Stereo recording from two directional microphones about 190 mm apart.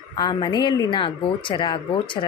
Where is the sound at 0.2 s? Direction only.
25° left (ahead or behind).